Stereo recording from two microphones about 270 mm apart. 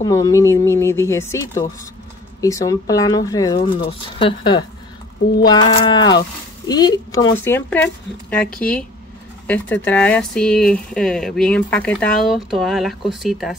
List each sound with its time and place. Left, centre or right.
0.0 s speech: centre
9.8 s speech: centre